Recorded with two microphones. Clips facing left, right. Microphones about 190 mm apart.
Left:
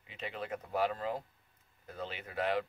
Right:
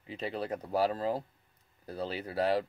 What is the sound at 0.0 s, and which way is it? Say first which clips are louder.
Speech: right 6 dB; 35° right (ahead or behind).